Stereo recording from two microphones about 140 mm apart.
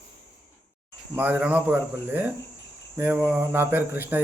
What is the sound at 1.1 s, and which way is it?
Speech, 15° right (ahead or behind).